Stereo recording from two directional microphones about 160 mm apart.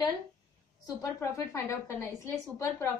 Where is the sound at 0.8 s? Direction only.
20° left (ahead or behind).